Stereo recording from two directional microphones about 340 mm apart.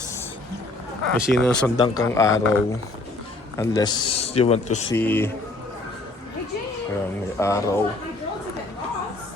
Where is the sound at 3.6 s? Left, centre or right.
Centre.